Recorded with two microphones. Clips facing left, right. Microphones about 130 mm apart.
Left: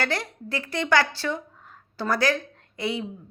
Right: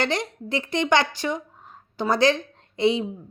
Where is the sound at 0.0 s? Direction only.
20° right (ahead or behind).